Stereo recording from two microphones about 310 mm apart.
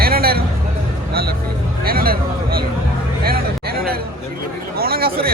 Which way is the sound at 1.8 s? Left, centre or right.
Right.